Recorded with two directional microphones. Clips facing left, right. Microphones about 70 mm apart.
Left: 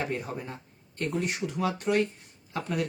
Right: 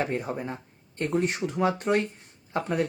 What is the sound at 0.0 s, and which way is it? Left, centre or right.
Speech, right.